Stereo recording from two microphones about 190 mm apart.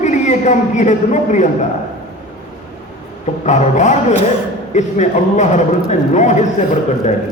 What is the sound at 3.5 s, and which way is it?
A man's voice, 40° left (ahead or behind).